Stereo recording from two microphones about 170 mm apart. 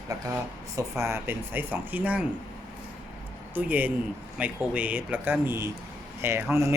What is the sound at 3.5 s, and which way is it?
Speech, 10° right (ahead or behind).